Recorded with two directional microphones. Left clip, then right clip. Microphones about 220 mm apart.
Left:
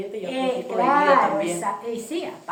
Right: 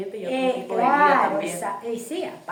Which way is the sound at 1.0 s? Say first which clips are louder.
Even; 15° right (ahead or behind).